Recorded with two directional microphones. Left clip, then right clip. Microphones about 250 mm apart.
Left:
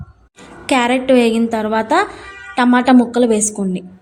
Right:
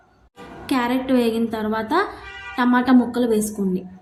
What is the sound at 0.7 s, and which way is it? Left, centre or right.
A woman's voice, left.